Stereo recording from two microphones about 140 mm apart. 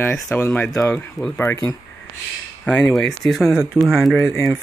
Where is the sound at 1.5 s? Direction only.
20° left (ahead or behind).